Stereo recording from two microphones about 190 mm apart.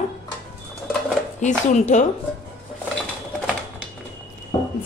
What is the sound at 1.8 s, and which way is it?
Speech, 40° left (ahead or behind).